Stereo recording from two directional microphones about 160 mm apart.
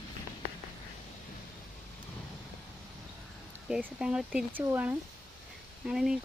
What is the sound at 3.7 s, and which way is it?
Speech, 5° right (ahead or behind).